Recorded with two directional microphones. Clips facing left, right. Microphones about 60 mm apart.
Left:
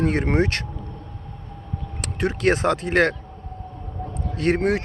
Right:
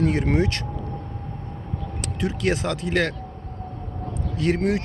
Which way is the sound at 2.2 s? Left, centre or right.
Left.